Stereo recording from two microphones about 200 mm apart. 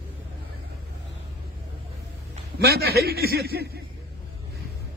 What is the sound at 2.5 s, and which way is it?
A man's voice, 50° right (ahead or behind).